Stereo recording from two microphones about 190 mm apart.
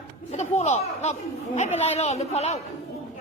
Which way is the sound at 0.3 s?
35° left (ahead or behind).